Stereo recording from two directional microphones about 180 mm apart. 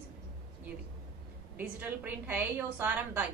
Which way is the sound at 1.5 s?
10° right (ahead or behind).